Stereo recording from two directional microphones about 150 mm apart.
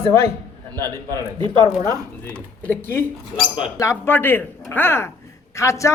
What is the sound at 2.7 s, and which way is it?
A man's voice, 15° left (ahead or behind).